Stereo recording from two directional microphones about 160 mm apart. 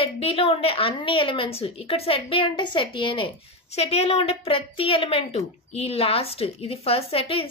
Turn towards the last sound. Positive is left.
turn(degrees=35)  # may be behind; listen again after turning